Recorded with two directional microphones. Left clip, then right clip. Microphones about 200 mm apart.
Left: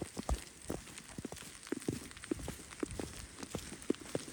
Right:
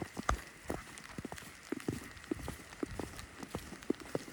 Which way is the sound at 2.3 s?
Centre (ahead or behind).